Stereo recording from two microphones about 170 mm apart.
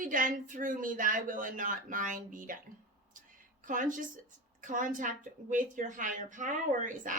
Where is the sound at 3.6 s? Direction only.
50° right (ahead or behind).